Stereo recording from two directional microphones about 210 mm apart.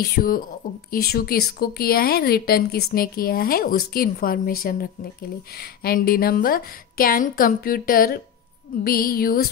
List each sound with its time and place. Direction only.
0.1 s a woman's voice: 45° left (ahead or behind)